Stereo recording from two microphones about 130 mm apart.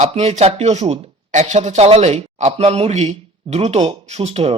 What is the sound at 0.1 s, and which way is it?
Speech, 55° right (ahead or behind).